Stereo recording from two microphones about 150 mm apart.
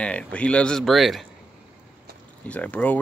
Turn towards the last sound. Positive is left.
turn(degrees=10)  # may be behind; listen again after turning